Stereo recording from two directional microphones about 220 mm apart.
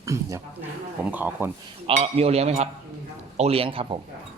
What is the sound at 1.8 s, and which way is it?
Speech, 30° right (ahead or behind).